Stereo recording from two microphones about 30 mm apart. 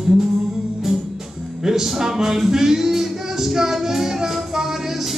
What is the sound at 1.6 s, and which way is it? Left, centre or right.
Speech, centre.